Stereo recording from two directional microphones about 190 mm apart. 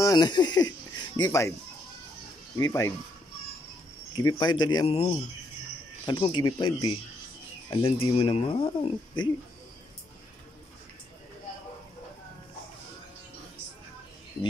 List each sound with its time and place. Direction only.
0.0 s speech: 20° left (ahead or behind)
2.6 s speech: 15° left (ahead or behind)
4.1 s speech: 20° left (ahead or behind)